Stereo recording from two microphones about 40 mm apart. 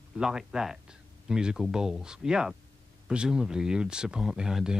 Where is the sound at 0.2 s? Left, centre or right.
Centre.